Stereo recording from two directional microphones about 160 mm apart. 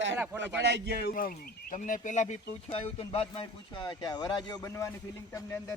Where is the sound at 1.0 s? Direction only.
65° left (ahead or behind).